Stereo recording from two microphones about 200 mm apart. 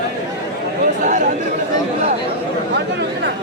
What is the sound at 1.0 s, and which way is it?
Chatter, 40° right (ahead or behind).